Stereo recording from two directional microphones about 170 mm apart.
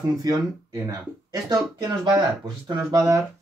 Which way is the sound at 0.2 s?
20° right (ahead or behind).